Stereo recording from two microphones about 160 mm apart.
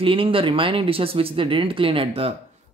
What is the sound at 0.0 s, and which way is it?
Speech, 35° right (ahead or behind).